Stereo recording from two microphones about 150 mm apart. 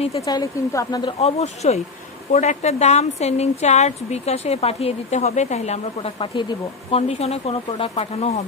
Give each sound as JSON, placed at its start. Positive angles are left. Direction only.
{"t": 0.2, "sound": "a woman's voice", "side_deg": 25}
{"t": 1.2, "sound": "a woman's voice", "side_deg": 45}